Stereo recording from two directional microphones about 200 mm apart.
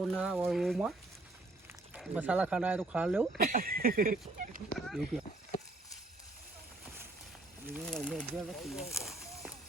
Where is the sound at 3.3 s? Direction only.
45° right (ahead or behind).